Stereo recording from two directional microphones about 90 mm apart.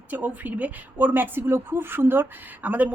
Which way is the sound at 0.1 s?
20° right (ahead or behind).